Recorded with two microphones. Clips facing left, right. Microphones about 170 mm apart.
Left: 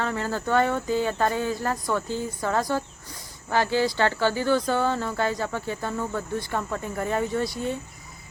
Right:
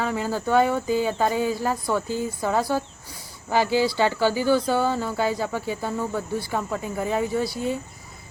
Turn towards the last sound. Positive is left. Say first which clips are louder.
# right 2 dB
turn(degrees=-5)  # may be behind; listen again after turning